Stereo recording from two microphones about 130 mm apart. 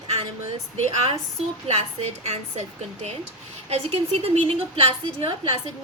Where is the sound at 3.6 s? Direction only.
50° right (ahead or behind).